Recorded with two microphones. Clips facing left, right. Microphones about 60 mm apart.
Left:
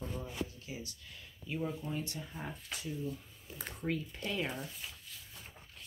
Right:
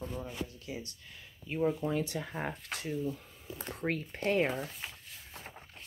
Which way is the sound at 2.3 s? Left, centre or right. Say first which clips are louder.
Right 6 dB; right.